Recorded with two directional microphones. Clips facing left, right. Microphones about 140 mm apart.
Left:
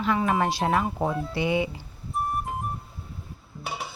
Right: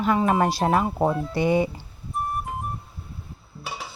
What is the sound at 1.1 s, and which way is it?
Speech, centre (ahead or behind).